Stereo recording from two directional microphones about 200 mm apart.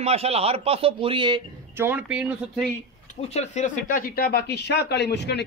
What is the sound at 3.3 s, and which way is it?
Speech, 35° left (ahead or behind).